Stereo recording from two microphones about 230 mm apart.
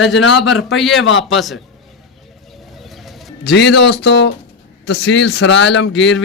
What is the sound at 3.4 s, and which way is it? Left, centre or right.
Speech, left.